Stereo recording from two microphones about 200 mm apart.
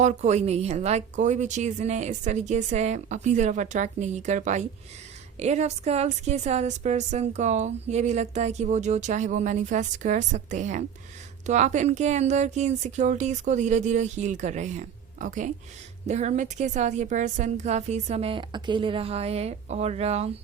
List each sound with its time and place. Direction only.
0.0 s a woman's voice: 35° right (ahead or behind)